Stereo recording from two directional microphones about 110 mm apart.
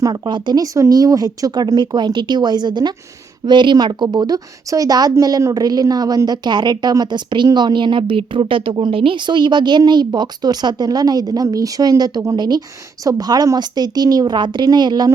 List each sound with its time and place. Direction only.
0.0 s speech: 45° right (ahead or behind)